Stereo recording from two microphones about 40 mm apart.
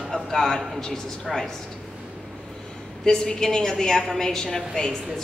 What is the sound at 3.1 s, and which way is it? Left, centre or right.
A woman's voice, centre.